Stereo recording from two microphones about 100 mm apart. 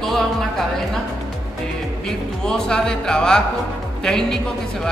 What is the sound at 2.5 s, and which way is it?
Speech, 5° left (ahead or behind).